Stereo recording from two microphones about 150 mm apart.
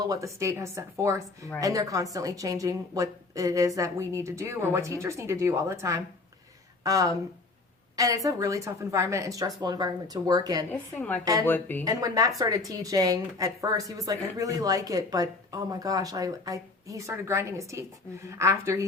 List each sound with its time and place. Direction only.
0.0 s a woman's voice: 20° right (ahead or behind)
10.7 s a woman's voice: 10° left (ahead or behind)
11.9 s a woman's voice: 25° right (ahead or behind)